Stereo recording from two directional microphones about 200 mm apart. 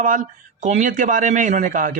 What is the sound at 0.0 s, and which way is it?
Speech, 40° right (ahead or behind).